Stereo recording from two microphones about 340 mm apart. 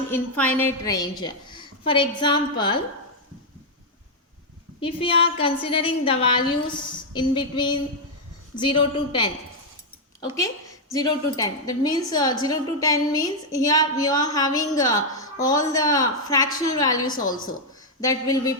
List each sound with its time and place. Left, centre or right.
0.1 s a woman's voice: centre
4.8 s a woman's voice: centre